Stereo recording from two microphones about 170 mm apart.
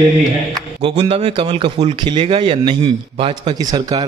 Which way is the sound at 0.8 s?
30° right (ahead or behind).